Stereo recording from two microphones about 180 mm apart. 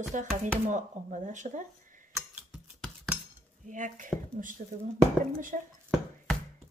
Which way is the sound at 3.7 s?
45° right (ahead or behind).